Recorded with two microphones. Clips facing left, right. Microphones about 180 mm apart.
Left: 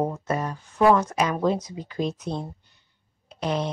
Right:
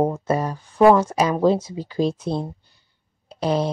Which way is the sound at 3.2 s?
35° right (ahead or behind).